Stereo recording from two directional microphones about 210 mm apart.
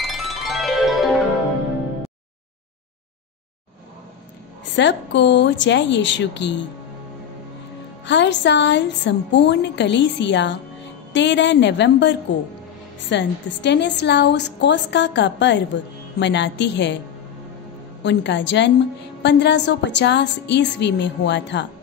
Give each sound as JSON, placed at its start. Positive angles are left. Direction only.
{"t": 0.0, "sound": "music", "side_deg": 0}
{"t": 4.7, "sound": "a woman's voice", "side_deg": 55}
{"t": 8.0, "sound": "a woman's voice", "side_deg": 60}
{"t": 18.0, "sound": "a woman's voice", "side_deg": 55}